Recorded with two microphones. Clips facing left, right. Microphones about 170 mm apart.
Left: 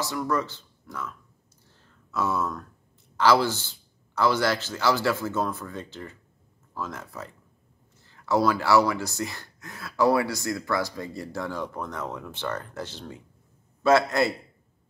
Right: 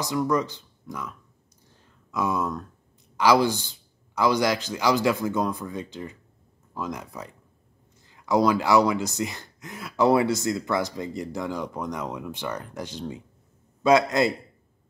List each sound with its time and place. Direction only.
0.0 s speech: 15° right (ahead or behind)
1.7 s a sound: 15° right (ahead or behind)
3.2 s a man's voice: 15° right (ahead or behind)